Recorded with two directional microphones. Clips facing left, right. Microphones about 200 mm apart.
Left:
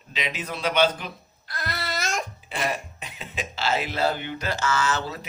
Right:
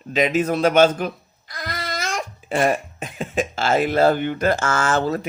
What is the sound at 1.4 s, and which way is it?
Babbling, 15° right (ahead or behind).